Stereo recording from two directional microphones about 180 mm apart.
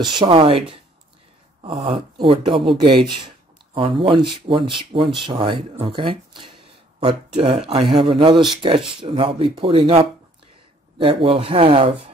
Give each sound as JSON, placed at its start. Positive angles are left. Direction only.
{"t": 0.0, "sound": "speech", "side_deg": -25}
{"t": 7.3, "sound": "speech", "side_deg": -40}